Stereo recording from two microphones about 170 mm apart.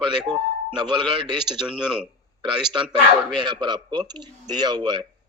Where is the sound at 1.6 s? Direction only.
5° right (ahead or behind).